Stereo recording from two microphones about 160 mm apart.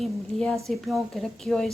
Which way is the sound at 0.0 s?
5° left (ahead or behind).